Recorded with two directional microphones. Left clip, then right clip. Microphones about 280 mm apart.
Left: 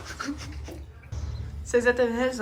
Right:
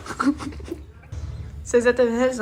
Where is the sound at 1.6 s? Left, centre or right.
Centre.